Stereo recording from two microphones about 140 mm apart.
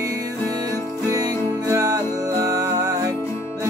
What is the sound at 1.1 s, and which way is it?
Music, 25° right (ahead or behind).